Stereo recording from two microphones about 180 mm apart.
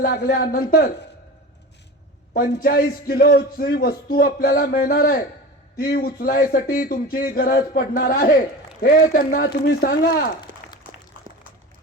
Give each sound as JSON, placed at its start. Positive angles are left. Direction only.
{"t": 0.0, "sound": "a man's voice", "side_deg": 60}
{"t": 2.3, "sound": "a man's voice", "side_deg": 55}
{"t": 10.5, "sound": "a sound", "side_deg": -50}